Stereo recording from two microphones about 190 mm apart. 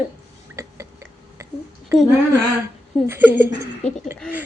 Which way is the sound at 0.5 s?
15° right (ahead or behind).